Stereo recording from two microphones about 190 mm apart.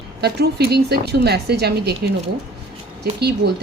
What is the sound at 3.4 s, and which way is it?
Speech, 60° right (ahead or behind).